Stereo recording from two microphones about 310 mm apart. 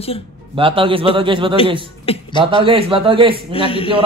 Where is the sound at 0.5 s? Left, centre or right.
Centre.